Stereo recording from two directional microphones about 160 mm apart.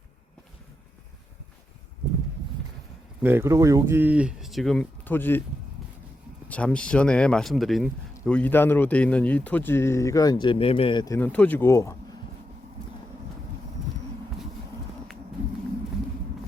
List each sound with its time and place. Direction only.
3.2 s speech: 15° right (ahead or behind); by 5.4 s 10° left (ahead or behind)
6.5 s speech: 5° left (ahead or behind); by 11.0 s 35° left (ahead or behind)
11.0 s speech: 15° left (ahead or behind)